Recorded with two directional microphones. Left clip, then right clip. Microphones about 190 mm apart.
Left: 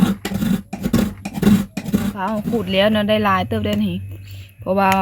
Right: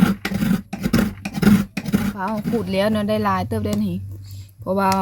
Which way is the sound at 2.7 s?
15° right (ahead or behind).